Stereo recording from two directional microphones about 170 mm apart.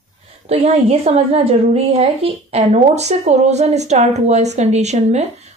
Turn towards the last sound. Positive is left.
turn(degrees=-40)  # may be behind; listen again after turning